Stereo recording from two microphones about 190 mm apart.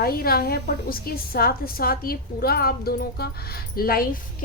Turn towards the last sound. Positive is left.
turn(degrees=50)  # may be behind; listen again after turning